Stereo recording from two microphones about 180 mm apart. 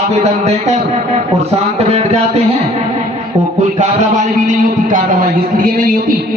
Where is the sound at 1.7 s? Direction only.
35° right (ahead or behind).